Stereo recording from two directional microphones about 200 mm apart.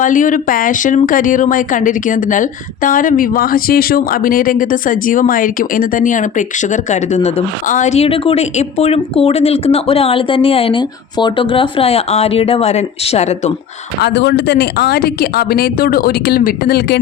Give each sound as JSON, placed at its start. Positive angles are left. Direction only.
{"t": 0.0, "sound": "speech", "side_deg": 40}
{"t": 14.0, "sound": "speech", "side_deg": 60}